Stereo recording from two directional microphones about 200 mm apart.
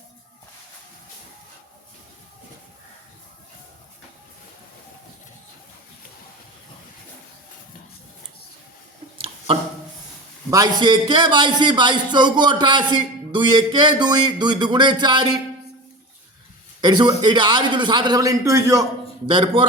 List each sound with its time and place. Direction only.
9.1 s a sound: 25° right (ahead or behind)
10.5 s a man's voice: 20° right (ahead or behind)
16.8 s a man's voice: 20° right (ahead or behind)